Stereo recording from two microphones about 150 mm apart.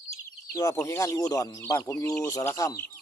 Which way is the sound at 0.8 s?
20° left (ahead or behind).